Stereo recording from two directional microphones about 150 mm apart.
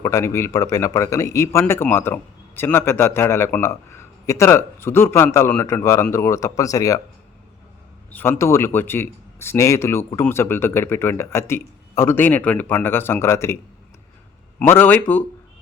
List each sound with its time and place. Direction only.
0.0 s speech: 20° left (ahead or behind)
8.1 s speech: 15° left (ahead or behind)
14.7 s speech: 15° left (ahead or behind)